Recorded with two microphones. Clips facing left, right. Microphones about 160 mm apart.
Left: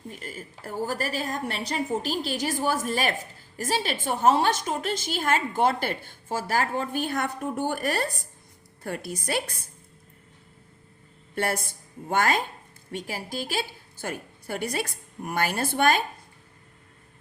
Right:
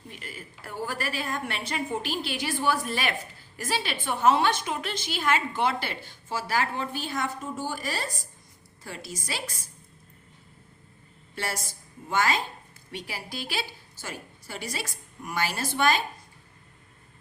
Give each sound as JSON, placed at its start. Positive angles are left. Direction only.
{"t": 0.1, "sound": "a woman's voice", "side_deg": 45}
{"t": 11.3, "sound": "a woman's voice", "side_deg": 55}
{"t": 12.9, "sound": "a woman's voice", "side_deg": 45}